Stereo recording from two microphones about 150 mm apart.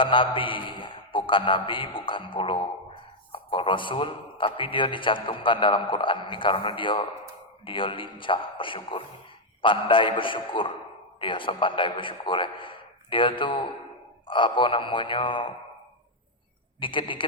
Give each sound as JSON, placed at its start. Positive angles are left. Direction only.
{"t": 0.0, "sound": "a man's voice", "side_deg": 35}
{"t": 16.8, "sound": "a man's voice", "side_deg": 35}